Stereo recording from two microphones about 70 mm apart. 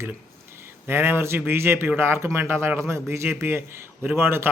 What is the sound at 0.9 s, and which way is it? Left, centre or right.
A man's voice, right.